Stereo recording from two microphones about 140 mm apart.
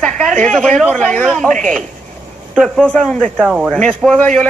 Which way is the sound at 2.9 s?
5° left (ahead or behind).